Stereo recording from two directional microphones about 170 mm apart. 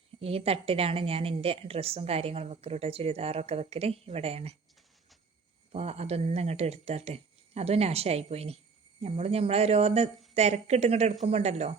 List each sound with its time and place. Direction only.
0.2 s a woman's voice: 35° right (ahead or behind)
5.7 s a woman's voice: 40° right (ahead or behind)